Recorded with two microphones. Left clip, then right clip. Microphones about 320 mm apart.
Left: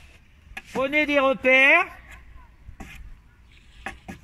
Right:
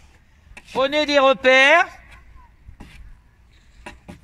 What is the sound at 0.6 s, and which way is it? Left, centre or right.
Speech, right.